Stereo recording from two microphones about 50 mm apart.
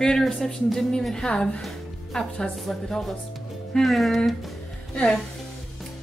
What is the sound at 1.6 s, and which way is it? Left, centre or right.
A woman's voice, centre.